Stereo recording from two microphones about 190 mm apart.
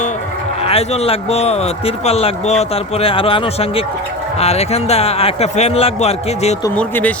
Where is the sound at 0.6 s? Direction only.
30° left (ahead or behind).